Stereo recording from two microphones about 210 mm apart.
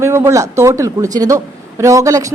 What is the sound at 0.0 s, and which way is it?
Speech, 15° right (ahead or behind).